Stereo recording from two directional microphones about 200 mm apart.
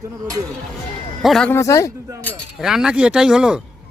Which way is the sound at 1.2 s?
Centre (ahead or behind).